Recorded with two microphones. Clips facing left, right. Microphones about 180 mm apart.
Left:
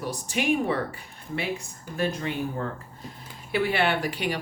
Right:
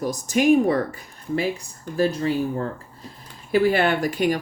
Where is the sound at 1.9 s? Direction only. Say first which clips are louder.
Right 7 dB; 35° right (ahead or behind).